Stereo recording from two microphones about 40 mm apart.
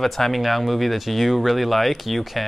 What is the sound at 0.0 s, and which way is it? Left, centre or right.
Speech, centre.